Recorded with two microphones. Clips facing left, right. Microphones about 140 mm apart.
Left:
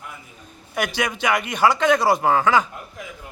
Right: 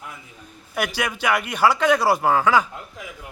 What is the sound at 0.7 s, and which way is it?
Speech, 5° right (ahead or behind).